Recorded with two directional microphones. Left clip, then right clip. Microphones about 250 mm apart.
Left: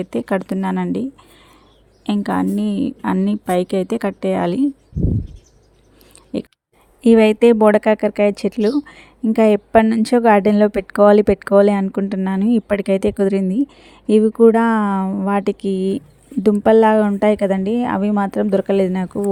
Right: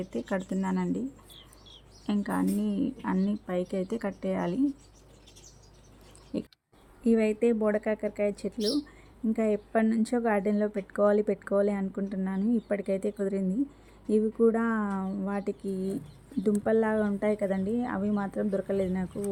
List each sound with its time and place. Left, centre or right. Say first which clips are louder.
0.0 s speech: left 12 dB; left
2.0 s speech: left 11 dB; left
6.3 s a sound: left 10 dB; left
7.0 s speech: left 14 dB; left